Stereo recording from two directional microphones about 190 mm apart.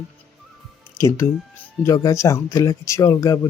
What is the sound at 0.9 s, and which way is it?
Speech, 15° left (ahead or behind).